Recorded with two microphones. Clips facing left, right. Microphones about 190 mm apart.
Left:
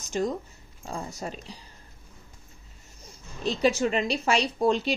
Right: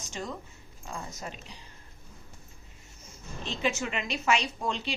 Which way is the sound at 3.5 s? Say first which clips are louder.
Left 8 dB; 40° left (ahead or behind).